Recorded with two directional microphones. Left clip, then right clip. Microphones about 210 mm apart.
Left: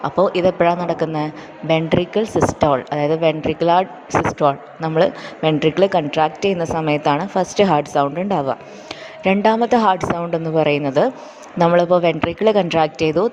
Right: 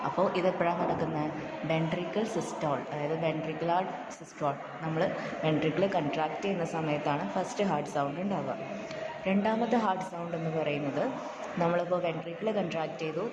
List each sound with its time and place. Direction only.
0.0 s a woman's voice: 40° left (ahead or behind)